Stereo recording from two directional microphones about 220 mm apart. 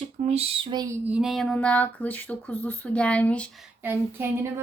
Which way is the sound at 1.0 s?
5° right (ahead or behind).